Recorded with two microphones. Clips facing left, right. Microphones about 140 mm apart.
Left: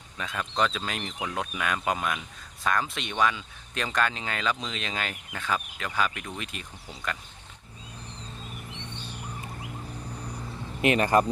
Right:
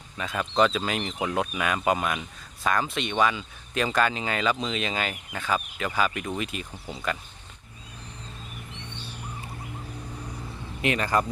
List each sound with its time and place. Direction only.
0.2 s speech: 5° right (ahead or behind)
10.8 s speech: 25° left (ahead or behind)